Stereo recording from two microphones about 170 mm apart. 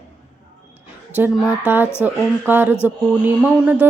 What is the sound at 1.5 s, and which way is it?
A woman's voice, 10° right (ahead or behind).